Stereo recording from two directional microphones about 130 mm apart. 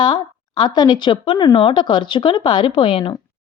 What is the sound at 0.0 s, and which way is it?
A woman's voice, 40° left (ahead or behind).